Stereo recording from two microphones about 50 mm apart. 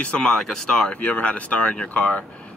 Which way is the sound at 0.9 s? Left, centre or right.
Left.